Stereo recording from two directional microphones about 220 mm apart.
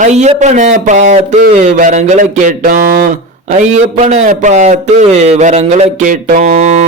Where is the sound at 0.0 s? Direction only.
30° right (ahead or behind).